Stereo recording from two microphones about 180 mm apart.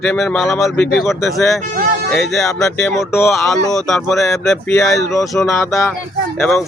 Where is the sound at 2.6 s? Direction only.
15° left (ahead or behind).